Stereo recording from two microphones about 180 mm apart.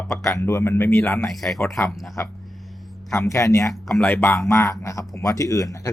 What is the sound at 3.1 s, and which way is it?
Speech, 15° left (ahead or behind).